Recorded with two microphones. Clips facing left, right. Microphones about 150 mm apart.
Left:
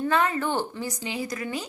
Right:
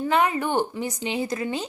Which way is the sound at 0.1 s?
15° right (ahead or behind).